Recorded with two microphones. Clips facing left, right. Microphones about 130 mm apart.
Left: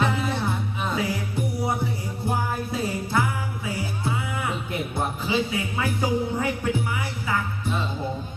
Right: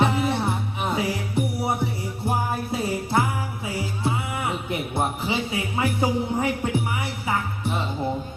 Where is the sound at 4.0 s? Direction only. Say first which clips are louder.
Right 3 dB; 25° right (ahead or behind).